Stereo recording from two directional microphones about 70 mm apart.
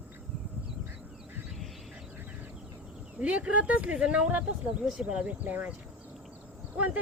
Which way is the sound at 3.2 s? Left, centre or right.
Centre.